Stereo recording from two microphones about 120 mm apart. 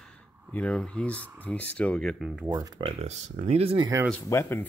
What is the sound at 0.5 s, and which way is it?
Speech, 10° left (ahead or behind).